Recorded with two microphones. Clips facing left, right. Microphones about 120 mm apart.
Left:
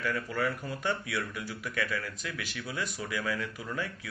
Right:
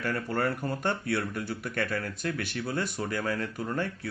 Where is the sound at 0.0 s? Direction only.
50° right (ahead or behind).